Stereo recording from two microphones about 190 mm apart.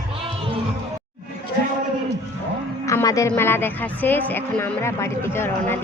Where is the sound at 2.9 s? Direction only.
15° left (ahead or behind).